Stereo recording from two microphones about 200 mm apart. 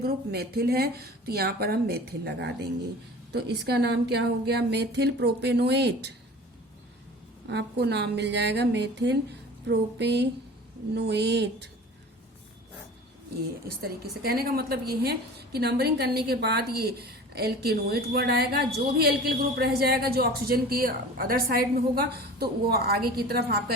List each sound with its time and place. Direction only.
0.0 s a woman's voice: 50° right (ahead or behind)
7.4 s a woman's voice: 55° right (ahead or behind)
14.0 s a woman's voice: 50° right (ahead or behind)